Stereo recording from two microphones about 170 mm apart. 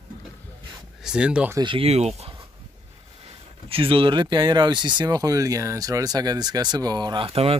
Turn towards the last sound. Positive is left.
turn(degrees=-35)  # may be behind; listen again after turning